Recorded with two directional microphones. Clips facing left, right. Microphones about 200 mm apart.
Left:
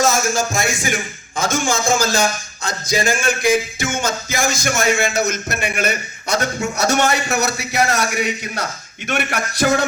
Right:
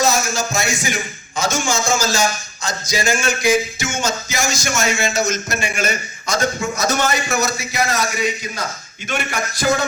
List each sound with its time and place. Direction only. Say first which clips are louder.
0.0 s music: left 1 dB; 50° left (ahead or behind); by 9.8 s 65° left (ahead or behind)